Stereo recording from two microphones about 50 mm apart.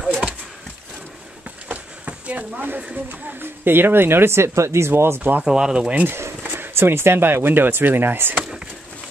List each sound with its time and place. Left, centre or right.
1.7 s a sound: right
3.1 s speech: right
5.4 s speech: centre
6.0 s speech: right